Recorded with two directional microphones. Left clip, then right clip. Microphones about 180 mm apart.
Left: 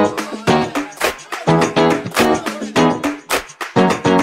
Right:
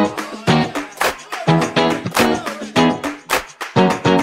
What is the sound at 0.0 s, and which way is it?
Music, centre (ahead or behind).